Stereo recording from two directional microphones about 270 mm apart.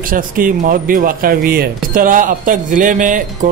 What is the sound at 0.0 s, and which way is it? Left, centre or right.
Speech, right.